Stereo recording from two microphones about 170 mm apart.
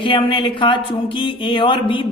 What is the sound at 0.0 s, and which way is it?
Speech, 30° left (ahead or behind).